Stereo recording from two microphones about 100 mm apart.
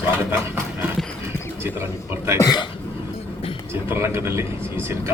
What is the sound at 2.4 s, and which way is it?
Speech, 45° left (ahead or behind).